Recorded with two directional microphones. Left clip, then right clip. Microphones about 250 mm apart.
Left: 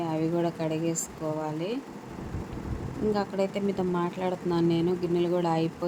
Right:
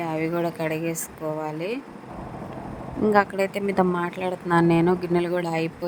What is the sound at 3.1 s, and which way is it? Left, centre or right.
Speech, right.